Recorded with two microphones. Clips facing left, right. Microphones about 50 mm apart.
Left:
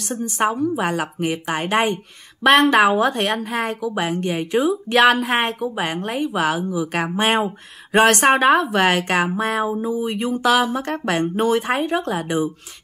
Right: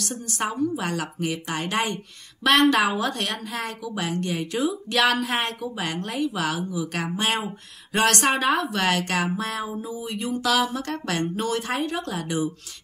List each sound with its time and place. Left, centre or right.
0.2 s speech: left